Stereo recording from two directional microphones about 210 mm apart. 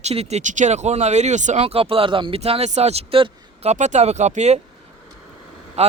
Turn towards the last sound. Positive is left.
turn(degrees=-30)  # may be behind; listen again after turning